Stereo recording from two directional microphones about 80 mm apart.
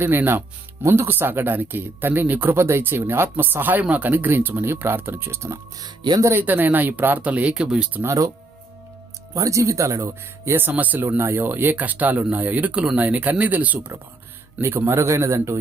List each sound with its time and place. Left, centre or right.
0.0 s speech: right
5.8 s speech: right
6.3 s speech: right
8.0 s speech: right
9.3 s speech: right; by 13.9 s centre
14.6 s a man's voice: right